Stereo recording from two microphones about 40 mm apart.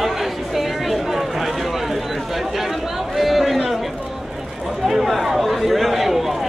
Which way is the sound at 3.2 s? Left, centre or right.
Centre.